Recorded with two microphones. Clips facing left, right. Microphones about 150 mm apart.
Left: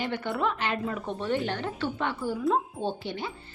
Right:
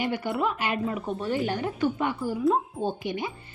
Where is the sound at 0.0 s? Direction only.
10° right (ahead or behind).